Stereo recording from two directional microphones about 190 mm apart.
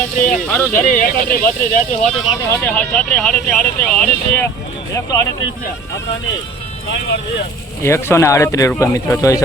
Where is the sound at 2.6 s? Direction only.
10° left (ahead or behind).